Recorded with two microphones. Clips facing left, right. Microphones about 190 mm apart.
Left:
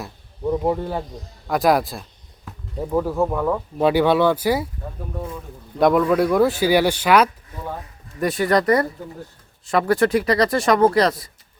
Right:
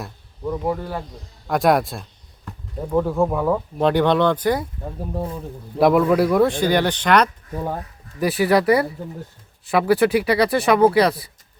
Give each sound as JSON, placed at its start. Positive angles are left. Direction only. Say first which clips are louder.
{"t": 0.4, "sound": "speech", "louder": "left 3 dB", "side_deg": 25}
{"t": 1.5, "sound": "speech", "louder": "even", "side_deg": 0}
{"t": 4.9, "sound": "speech", "louder": "right 4 dB", "side_deg": -30}
{"t": 5.8, "sound": "speech", "louder": "right 1 dB", "side_deg": -5}